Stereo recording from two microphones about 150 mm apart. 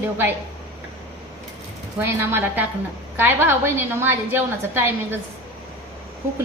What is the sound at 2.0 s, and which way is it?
A woman's voice, 15° right (ahead or behind).